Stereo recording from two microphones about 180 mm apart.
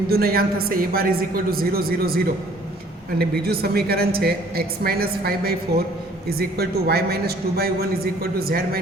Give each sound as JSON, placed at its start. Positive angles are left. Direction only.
{"t": 0.1, "sound": "a woman's voice", "side_deg": -55}